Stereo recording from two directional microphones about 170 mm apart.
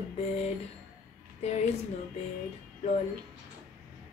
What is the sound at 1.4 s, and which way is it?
Speech, 40° left (ahead or behind).